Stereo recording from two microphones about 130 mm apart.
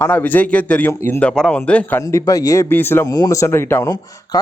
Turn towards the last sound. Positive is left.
turn(degrees=20)  # may be behind; listen again after turning